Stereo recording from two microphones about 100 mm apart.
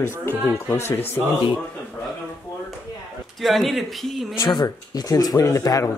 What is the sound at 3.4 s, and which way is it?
Speech, centre (ahead or behind).